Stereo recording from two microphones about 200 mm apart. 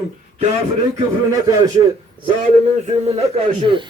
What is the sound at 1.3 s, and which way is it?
Speech, 15° right (ahead or behind).